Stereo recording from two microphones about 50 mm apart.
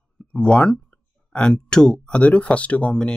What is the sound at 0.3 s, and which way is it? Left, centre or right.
Speech, centre.